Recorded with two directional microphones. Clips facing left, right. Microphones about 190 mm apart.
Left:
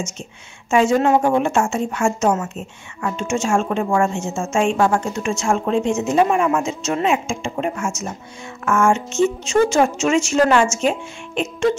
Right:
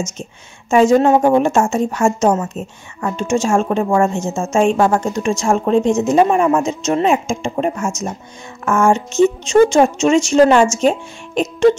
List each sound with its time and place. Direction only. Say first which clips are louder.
0.0 s speech: right 4 dB; 40° right (ahead or behind)